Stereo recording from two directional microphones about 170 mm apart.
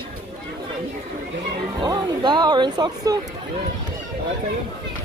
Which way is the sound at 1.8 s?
25° right (ahead or behind).